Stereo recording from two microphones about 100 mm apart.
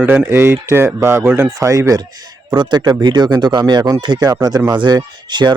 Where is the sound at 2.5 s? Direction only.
45° right (ahead or behind).